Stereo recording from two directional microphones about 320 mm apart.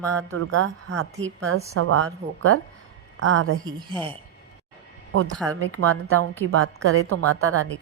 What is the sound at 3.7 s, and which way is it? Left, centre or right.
Speech, centre.